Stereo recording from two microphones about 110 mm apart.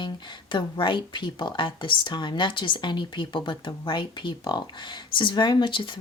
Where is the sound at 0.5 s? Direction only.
50° left (ahead or behind).